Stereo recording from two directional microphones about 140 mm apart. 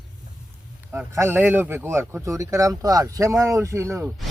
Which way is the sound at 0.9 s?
15° right (ahead or behind).